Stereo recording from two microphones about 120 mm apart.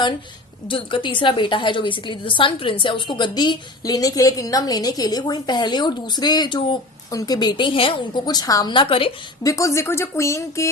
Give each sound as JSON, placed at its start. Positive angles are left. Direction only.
{"t": 0.7, "sound": "a woman's voice", "side_deg": 45}
{"t": 7.1, "sound": "a woman's voice", "side_deg": 30}
{"t": 8.7, "sound": "a woman's voice", "side_deg": 45}
{"t": 9.4, "sound": "speech", "side_deg": 25}